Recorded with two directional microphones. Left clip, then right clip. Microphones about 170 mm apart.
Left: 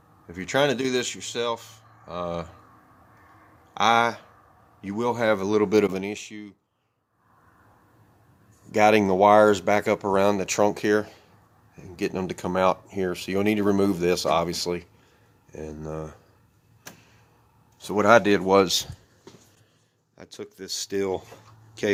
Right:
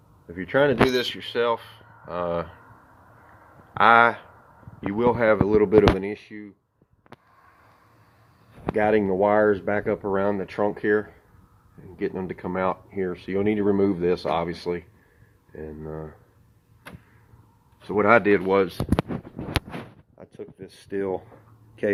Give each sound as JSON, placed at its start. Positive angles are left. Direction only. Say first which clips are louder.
{"t": 0.3, "sound": "speech", "louder": "right 2 dB", "side_deg": 25}
{"t": 3.8, "sound": "speech", "louder": "right 4 dB", "side_deg": 20}
{"t": 8.7, "sound": "speech", "louder": "left 2 dB", "side_deg": 30}
{"t": 17.8, "sound": "speech", "louder": "even", "side_deg": 15}
{"t": 20.4, "sound": "speech", "louder": "left 8 dB", "side_deg": 55}